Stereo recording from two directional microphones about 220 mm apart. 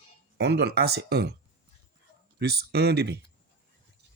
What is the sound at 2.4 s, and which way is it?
Speech, 45° right (ahead or behind).